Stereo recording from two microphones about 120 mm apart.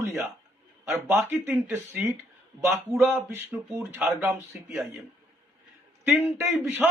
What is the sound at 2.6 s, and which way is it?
A man's voice, 25° right (ahead or behind).